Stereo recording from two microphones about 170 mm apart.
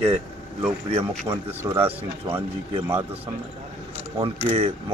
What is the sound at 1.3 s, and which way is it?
Speech, 10° right (ahead or behind).